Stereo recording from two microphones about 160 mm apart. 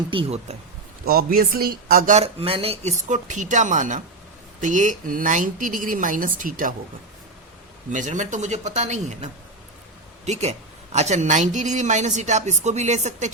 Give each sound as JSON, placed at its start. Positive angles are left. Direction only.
{"t": 0.1, "sound": "speech", "side_deg": -35}
{"t": 1.0, "sound": "speech", "side_deg": -70}
{"t": 3.1, "sound": "speech", "side_deg": -50}
{"t": 7.9, "sound": "speech", "side_deg": -50}